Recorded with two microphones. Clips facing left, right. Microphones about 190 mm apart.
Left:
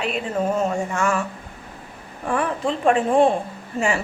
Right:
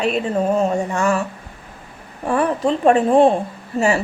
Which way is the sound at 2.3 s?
40° right (ahead or behind).